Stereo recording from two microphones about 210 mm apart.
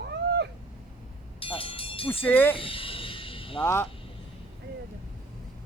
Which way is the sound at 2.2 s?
10° left (ahead or behind).